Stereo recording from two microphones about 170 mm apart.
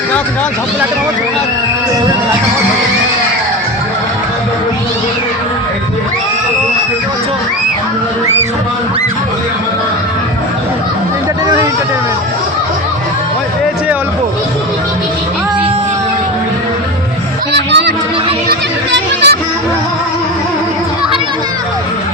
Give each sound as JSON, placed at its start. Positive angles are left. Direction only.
{"t": 11.4, "sound": "vehicle", "side_deg": -25}
{"t": 17.5, "sound": "a sound", "side_deg": -90}
{"t": 18.4, "sound": "music", "side_deg": -75}